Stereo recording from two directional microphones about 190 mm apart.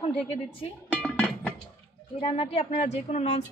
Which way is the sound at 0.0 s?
30° left (ahead or behind).